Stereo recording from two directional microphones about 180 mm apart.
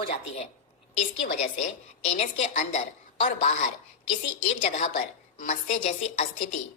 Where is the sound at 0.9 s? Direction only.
40° left (ahead or behind).